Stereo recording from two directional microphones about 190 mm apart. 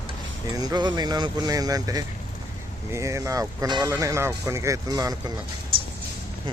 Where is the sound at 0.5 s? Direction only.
20° right (ahead or behind).